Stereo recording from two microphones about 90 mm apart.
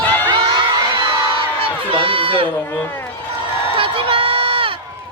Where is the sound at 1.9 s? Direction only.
85° right.